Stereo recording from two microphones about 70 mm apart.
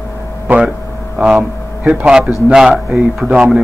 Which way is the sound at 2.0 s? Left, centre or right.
Centre.